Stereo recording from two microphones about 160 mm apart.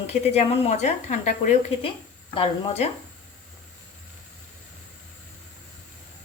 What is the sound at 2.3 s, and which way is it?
Speech, 35° left (ahead or behind).